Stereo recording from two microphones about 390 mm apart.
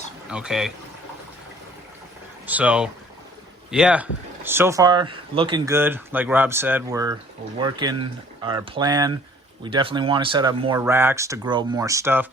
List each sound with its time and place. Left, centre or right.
0.3 s speech: centre
2.5 s speech: centre